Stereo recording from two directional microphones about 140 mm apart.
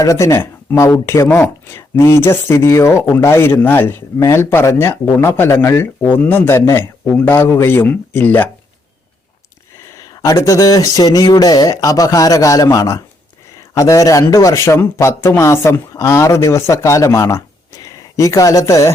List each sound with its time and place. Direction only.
0.0 s speech: 20° left (ahead or behind)
9.9 s a man's voice: 25° left (ahead or behind)